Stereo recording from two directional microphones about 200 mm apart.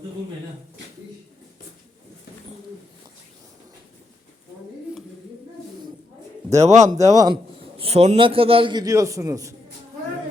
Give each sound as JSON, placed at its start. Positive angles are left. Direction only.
{"t": 6.7, "sound": "speech", "side_deg": -15}
{"t": 7.8, "sound": "a man's voice", "side_deg": -30}